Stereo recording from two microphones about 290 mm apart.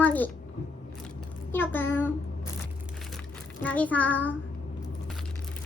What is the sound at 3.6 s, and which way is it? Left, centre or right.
Speech, centre.